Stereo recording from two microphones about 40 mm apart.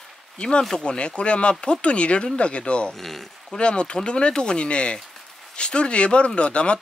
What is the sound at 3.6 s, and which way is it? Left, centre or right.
Speech, left.